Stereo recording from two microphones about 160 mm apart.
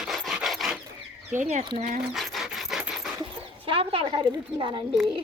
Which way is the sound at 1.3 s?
45° right (ahead or behind).